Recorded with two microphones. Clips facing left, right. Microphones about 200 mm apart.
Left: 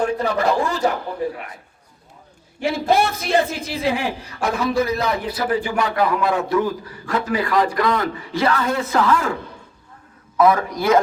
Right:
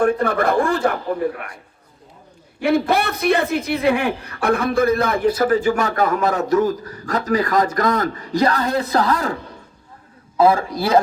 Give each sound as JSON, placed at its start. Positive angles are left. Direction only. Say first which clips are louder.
{"t": 0.0, "sound": "speech", "louder": "right 2 dB", "side_deg": -55}
{"t": 2.6, "sound": "speech", "louder": "right 1 dB", "side_deg": -60}
{"t": 10.3, "sound": "a man's voice", "louder": "right 1 dB", "side_deg": -30}